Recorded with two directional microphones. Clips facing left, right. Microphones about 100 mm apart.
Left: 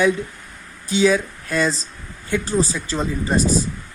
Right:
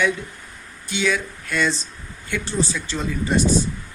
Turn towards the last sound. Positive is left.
turn(degrees=35)  # may be behind; listen again after turning